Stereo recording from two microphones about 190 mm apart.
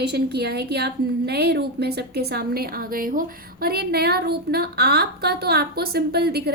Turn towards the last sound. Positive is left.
turn(degrees=-55)  # may be behind; listen again after turning